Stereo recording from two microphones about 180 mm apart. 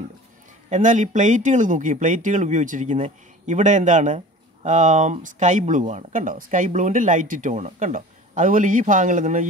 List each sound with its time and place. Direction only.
0.7 s speech: 45° right (ahead or behind)